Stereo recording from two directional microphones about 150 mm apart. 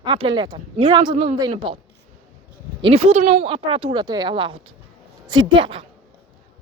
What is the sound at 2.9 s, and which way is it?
Speech, 45° right (ahead or behind).